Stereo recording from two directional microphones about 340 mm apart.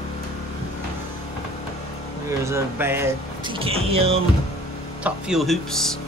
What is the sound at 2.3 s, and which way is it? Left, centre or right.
Speech, centre.